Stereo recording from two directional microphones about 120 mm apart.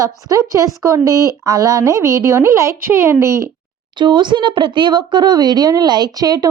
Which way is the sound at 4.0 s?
40° right (ahead or behind).